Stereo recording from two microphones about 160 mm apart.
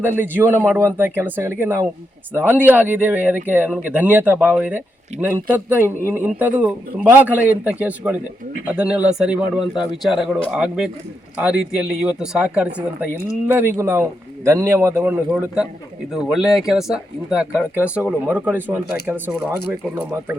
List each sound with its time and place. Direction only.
0.0 s a man's voice: 15° right (ahead or behind)